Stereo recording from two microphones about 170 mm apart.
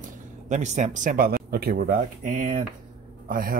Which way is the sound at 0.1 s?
45° right (ahead or behind).